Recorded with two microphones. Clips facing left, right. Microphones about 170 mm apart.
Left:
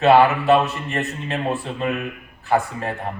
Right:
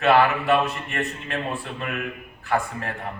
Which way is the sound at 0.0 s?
20° left (ahead or behind).